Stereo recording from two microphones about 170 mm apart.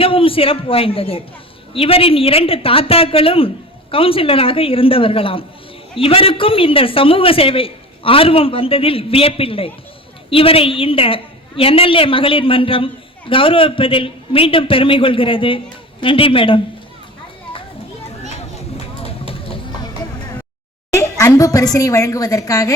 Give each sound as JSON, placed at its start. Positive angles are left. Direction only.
{"t": 0.0, "sound": "a woman's voice", "side_deg": 30}
{"t": 20.9, "sound": "a sound", "side_deg": 15}
{"t": 21.8, "sound": "a woman's voice", "side_deg": 20}